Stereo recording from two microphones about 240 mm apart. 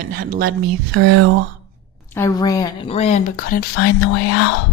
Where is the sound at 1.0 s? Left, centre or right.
Right.